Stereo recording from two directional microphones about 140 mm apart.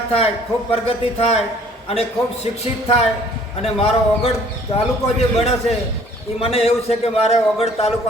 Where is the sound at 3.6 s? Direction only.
45° left (ahead or behind).